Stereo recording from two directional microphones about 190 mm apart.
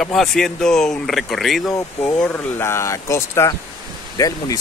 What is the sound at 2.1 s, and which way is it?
Speech, 5° left (ahead or behind).